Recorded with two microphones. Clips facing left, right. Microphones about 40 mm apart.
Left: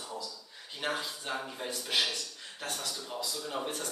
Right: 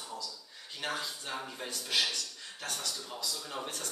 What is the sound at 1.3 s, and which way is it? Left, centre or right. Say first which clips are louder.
Speech: left 2 dB; centre.